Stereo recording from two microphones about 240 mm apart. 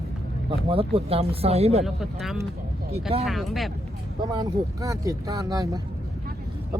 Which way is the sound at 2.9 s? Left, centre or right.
Right.